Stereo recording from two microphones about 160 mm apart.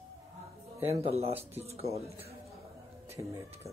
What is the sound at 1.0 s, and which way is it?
Speech, 40° right (ahead or behind).